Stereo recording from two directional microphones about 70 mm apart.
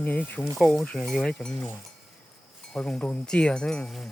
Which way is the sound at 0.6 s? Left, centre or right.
Centre.